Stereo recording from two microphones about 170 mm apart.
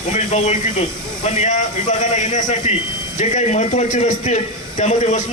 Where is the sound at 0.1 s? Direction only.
40° left (ahead or behind).